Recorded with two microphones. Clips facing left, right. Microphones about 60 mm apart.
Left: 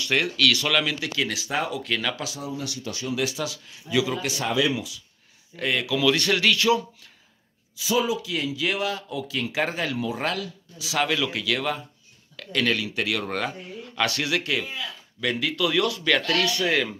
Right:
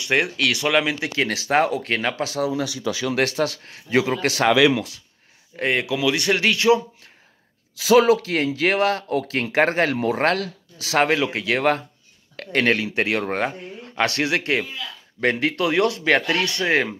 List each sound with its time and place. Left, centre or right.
0.0 s speech: right
1.2 s speech: right
3.1 s speech: right
4.3 s speech: right
5.6 s speech: right
5.9 s speech: centre
7.7 s speech: right
16.5 s speech: right